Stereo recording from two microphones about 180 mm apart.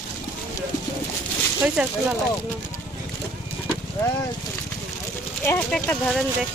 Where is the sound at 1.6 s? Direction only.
5° right (ahead or behind).